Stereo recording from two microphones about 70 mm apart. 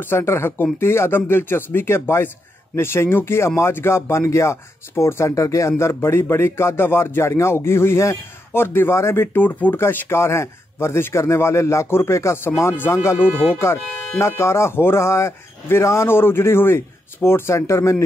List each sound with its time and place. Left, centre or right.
0.0 s speech: left